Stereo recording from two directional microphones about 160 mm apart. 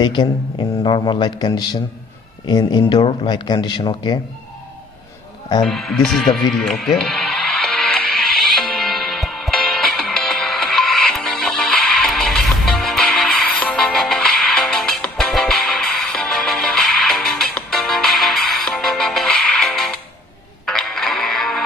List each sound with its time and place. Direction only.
0.0 s a man's voice: 30° left (ahead or behind)
5.6 s music: centre (ahead or behind)